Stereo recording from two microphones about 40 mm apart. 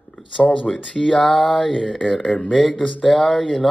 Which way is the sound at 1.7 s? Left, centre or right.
Centre.